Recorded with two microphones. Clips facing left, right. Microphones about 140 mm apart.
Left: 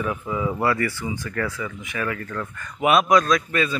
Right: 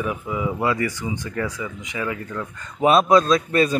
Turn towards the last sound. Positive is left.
turn(degrees=-35)  # may be behind; listen again after turning